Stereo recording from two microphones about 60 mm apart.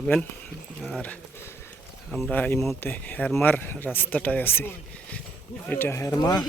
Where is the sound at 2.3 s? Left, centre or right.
Left.